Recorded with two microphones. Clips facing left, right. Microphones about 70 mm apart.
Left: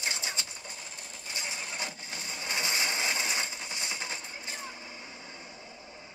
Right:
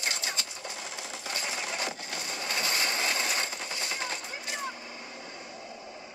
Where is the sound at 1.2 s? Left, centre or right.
Right.